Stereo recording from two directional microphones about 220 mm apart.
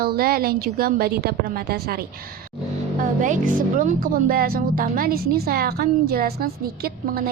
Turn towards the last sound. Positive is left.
turn(degrees=-45)  # may be behind; listen again after turning